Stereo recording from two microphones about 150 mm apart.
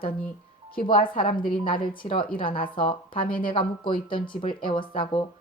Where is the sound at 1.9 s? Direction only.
35° left (ahead or behind).